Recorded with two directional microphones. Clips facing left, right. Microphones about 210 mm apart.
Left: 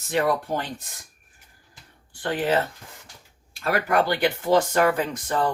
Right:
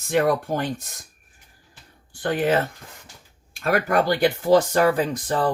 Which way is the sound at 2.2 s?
50° right (ahead or behind).